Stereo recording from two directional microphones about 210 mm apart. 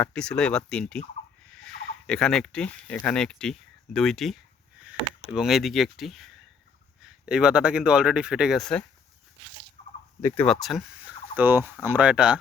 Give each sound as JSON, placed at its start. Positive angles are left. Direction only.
{"t": 0.0, "sound": "speech", "side_deg": 5}
{"t": 9.8, "sound": "turkey", "side_deg": 30}
{"t": 10.2, "sound": "speech", "side_deg": 15}
{"t": 10.4, "sound": "speech", "side_deg": 0}